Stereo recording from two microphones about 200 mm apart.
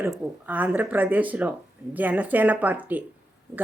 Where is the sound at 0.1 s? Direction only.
10° right (ahead or behind).